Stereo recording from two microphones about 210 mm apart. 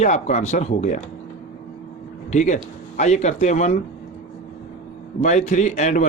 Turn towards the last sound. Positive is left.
turn(degrees=35)  # may be behind; listen again after turning